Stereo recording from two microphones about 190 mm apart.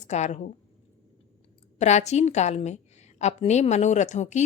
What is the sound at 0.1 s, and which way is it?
Speech, 35° left (ahead or behind).